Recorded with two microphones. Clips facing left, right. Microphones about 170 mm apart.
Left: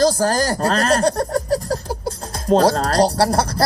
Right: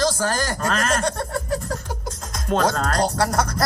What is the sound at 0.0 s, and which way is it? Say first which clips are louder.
Speech: left 6 dB; 35° left (ahead or behind).